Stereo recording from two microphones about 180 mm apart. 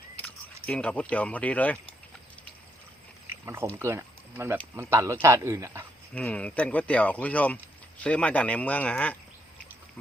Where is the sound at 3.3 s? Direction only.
15° right (ahead or behind).